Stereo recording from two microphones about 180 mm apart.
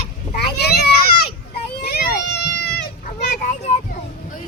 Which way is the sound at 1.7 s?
60° left (ahead or behind).